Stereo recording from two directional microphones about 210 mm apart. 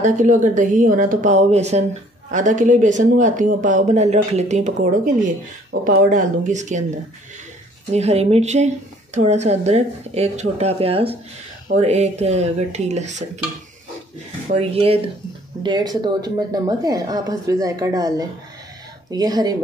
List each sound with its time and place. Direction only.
0.0 s speech: 35° right (ahead or behind)
5.9 s speech: 40° right (ahead or behind)
7.9 s speech: 30° right (ahead or behind)
14.5 s speech: 30° right (ahead or behind)